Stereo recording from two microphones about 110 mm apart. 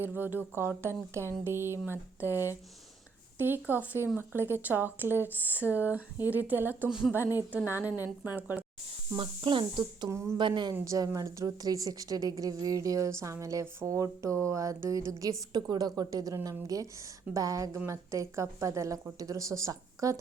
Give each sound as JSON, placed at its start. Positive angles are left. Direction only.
{"t": 0.0, "sound": "speech", "side_deg": -20}
{"t": 9.1, "sound": "speech", "side_deg": -50}
{"t": 10.1, "sound": "speech", "side_deg": -25}
{"t": 10.3, "sound": "speech", "side_deg": -45}
{"t": 10.8, "sound": "a woman's voice", "side_deg": -30}